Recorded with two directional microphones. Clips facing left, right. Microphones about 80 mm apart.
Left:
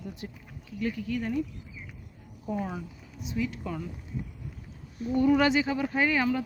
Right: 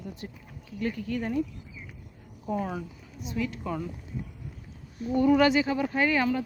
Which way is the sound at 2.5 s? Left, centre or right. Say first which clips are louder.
Right 2 dB; centre.